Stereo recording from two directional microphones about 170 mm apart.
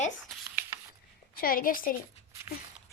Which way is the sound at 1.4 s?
60° left (ahead or behind).